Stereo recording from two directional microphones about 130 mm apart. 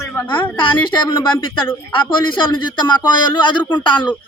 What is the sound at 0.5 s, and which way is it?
Speech, 35° left (ahead or behind).